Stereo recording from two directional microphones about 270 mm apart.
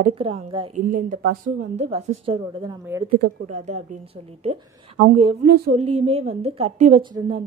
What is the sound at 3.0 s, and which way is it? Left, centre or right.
A woman's voice, right.